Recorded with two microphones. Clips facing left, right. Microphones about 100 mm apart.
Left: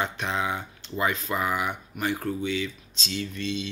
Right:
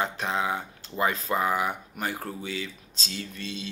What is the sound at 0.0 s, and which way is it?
Speech, 30° right (ahead or behind).